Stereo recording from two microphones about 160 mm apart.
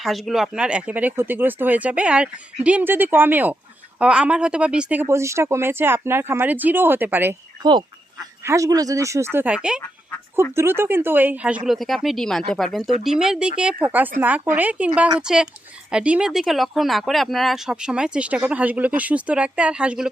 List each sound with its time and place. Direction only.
0.0 s a woman's voice: centre (ahead or behind)
7.6 s a woman's voice: 25° right (ahead or behind); by 9.8 s 5° right (ahead or behind)
10.5 s a woman's voice: 15° right (ahead or behind)